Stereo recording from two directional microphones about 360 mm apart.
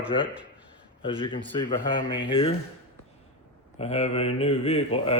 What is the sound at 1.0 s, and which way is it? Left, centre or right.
Speech, centre.